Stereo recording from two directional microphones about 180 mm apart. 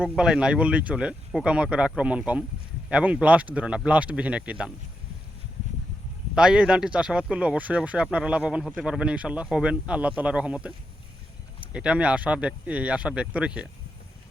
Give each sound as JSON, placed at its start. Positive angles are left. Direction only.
{"t": 0.0, "sound": "speech", "side_deg": -5}
{"t": 6.3, "sound": "speech", "side_deg": -5}